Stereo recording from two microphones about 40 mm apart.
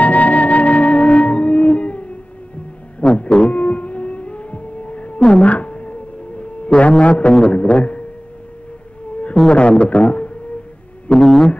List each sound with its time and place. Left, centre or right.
0.0 s music: left
3.0 s a sound: left
3.5 s music: left
7.4 s speech: left
9.5 s speech: left
11.1 s speech: centre